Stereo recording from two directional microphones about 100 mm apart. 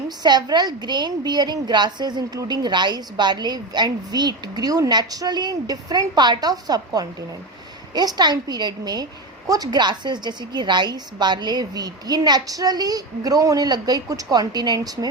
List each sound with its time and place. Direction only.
0.2 s a woman's voice: 45° right (ahead or behind)